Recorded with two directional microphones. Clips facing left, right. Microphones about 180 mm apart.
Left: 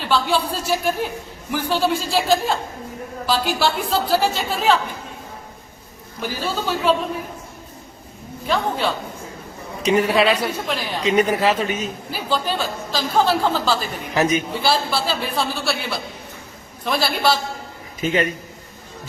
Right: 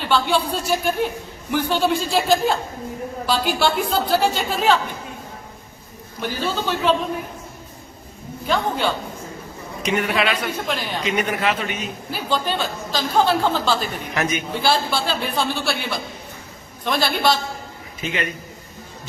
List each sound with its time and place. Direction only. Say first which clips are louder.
0.0 s a man's voice: even; centre (ahead or behind)
6.1 s a man's voice: right 1 dB; 5° left (ahead or behind)
8.4 s a man's voice: even; centre (ahead or behind)
9.8 s speech: left 5 dB; 35° left (ahead or behind)
10.7 s a man's voice: even; centre (ahead or behind)
11.0 s speech: left 5 dB; 30° left (ahead or behind)
12.1 s a man's voice: even; centre (ahead or behind)
14.1 s speech: left 6 dB; 35° left (ahead or behind)
14.5 s a man's voice: even; centre (ahead or behind)
18.0 s speech: left 6 dB; 35° left (ahead or behind)